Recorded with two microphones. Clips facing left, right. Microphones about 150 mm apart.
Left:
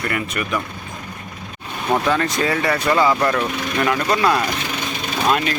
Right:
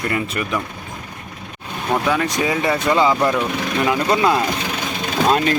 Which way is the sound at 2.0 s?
10° right (ahead or behind).